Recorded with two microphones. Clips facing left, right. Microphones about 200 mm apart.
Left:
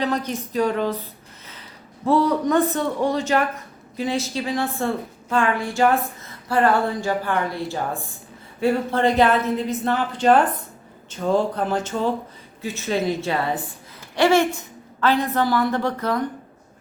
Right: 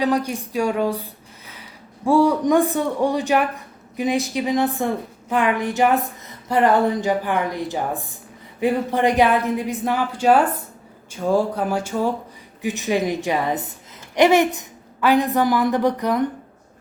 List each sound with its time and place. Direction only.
0.0 s a woman's voice: 10° right (ahead or behind)